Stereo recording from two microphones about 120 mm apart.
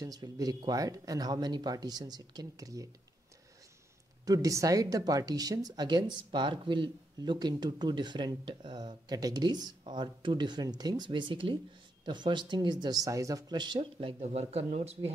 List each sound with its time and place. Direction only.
0.0 s speech: 30° right (ahead or behind)
4.3 s speech: 30° right (ahead or behind); by 14.1 s 45° right (ahead or behind)
14.2 s speech: 65° right (ahead or behind)